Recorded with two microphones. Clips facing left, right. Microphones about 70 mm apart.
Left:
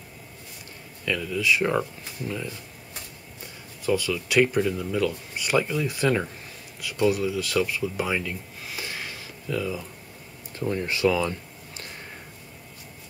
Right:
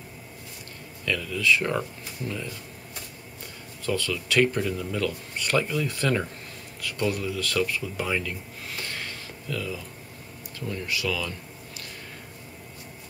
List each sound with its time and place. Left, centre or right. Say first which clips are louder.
1.0 s speech: even; centre
3.8 s speech: left 3 dB; centre
10.5 s speech: left 4 dB; left